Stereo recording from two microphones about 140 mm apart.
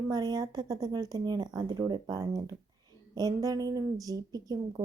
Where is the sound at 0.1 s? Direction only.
30° right (ahead or behind).